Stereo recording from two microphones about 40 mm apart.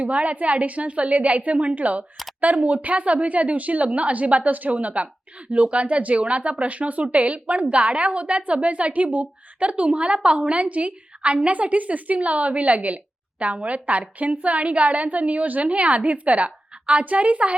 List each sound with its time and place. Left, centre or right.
0.0 s speech: right